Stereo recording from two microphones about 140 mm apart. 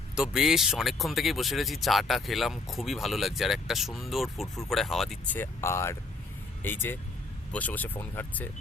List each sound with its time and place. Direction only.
0.2 s speech: 5° right (ahead or behind)
5.3 s speech: 15° left (ahead or behind)